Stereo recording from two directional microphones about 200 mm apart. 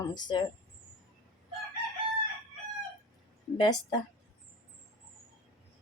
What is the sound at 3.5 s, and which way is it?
Speech, 20° left (ahead or behind).